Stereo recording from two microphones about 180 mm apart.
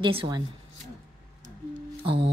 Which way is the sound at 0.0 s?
30° right (ahead or behind).